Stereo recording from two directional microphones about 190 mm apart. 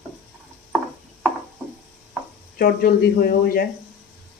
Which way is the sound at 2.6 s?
50° left (ahead or behind).